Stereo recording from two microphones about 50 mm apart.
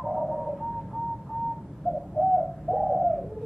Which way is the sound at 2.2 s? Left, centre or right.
Centre.